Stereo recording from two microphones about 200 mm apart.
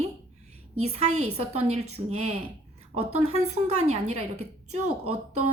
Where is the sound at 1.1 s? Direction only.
90° right.